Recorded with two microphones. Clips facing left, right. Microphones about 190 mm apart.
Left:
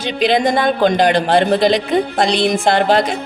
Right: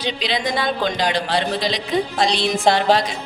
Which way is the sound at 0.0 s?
50° left (ahead or behind).